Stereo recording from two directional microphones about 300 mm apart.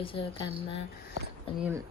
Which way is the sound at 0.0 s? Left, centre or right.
Centre.